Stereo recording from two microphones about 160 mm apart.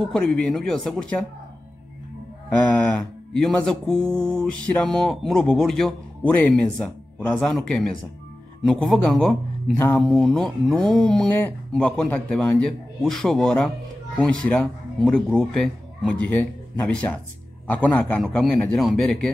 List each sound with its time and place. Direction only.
0.0 s speech: 5° left (ahead or behind)
3.3 s speech: 5° left (ahead or behind)